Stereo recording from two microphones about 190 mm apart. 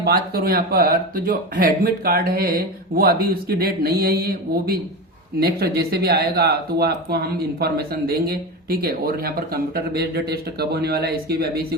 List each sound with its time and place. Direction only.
0.0 s speech: 55° right (ahead or behind)